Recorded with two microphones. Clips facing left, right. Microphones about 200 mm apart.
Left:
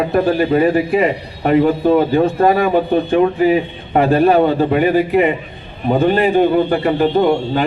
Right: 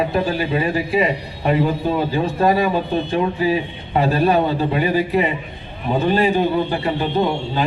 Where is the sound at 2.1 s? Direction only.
50° left (ahead or behind).